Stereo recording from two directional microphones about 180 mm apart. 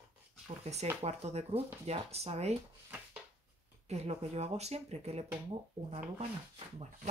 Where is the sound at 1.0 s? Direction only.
35° right (ahead or behind).